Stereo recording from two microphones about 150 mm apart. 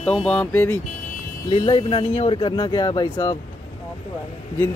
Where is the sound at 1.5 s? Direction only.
35° left (ahead or behind).